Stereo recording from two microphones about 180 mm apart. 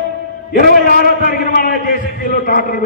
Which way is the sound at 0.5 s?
50° left (ahead or behind).